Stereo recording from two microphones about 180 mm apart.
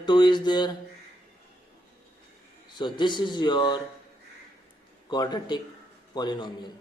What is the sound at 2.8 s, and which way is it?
Speech, 25° left (ahead or behind).